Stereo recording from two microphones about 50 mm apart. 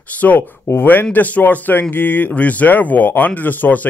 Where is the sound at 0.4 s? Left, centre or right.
Left.